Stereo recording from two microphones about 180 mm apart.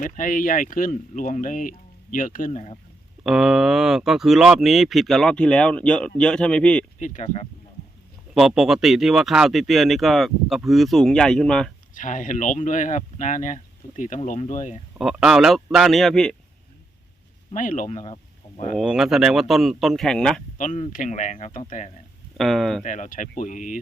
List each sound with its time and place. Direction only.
0.0 s speech: 45° left (ahead or behind)
3.2 s speech: 5° right (ahead or behind)
7.0 s speech: 45° left (ahead or behind)
8.4 s speech: 5° right (ahead or behind)
11.9 s speech: 45° left (ahead or behind)
14.9 s speech: 5° right (ahead or behind)
17.5 s speech: 45° left (ahead or behind)
18.8 s speech: centre (ahead or behind)
20.6 s speech: 45° left (ahead or behind)
22.4 s speech: centre (ahead or behind)
22.8 s speech: 45° left (ahead or behind)